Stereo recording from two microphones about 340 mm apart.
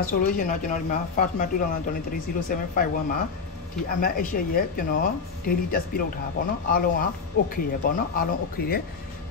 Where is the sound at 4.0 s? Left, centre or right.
Left.